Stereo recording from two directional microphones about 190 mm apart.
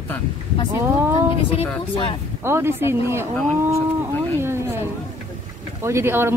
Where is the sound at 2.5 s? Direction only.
15° right (ahead or behind).